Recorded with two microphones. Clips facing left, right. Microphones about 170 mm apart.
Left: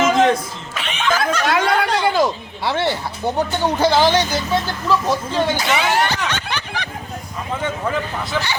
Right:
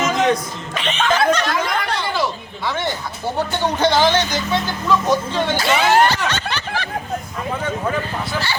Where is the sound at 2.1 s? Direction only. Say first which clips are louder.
Left 4 dB; 40° left (ahead or behind).